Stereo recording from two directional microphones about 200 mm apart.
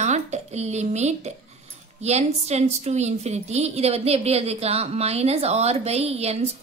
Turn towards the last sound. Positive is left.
turn(degrees=-30)  # may be behind; listen again after turning